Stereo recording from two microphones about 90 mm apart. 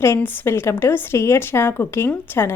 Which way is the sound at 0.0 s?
25° left (ahead or behind).